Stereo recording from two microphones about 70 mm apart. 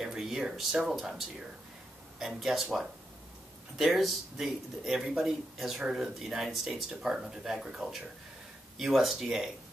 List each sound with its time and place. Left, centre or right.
0.0 s speech: centre